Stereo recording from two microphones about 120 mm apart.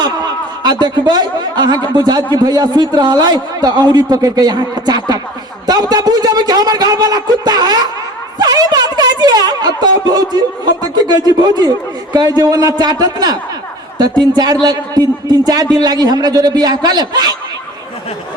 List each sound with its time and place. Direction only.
0.0 s a man's voice: 35° right (ahead or behind)